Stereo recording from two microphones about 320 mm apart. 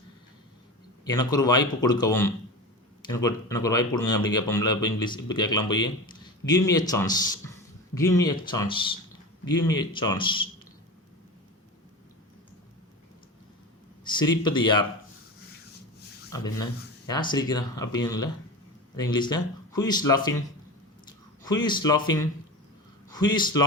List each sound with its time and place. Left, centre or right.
1.0 s speech: centre
14.0 s speech: centre
16.3 s speech: centre
21.4 s speech: centre